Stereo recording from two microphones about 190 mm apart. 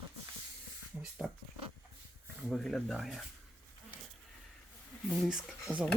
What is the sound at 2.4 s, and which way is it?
Speech, centre (ahead or behind).